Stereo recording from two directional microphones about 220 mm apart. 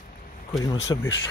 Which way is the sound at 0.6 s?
20° left (ahead or behind).